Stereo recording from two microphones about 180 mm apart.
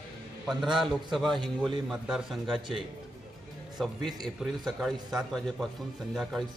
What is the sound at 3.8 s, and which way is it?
A man's voice, centre (ahead or behind).